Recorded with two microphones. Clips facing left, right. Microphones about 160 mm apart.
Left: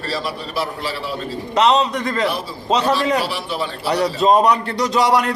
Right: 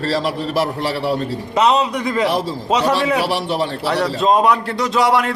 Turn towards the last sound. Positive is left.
turn(degrees=0)  # may be behind; listen again after turning